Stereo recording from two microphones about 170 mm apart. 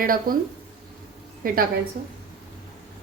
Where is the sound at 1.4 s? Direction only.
60° right (ahead or behind).